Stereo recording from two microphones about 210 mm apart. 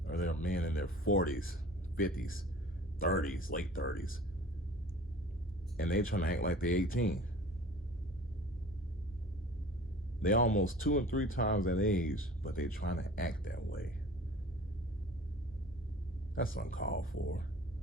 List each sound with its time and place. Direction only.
0.0 s a sound: 45° left (ahead or behind)
0.4 s speech: 45° left (ahead or behind)
5.7 s speech: 45° left (ahead or behind)
10.2 s speech: 40° left (ahead or behind)
16.3 s speech: 40° left (ahead or behind)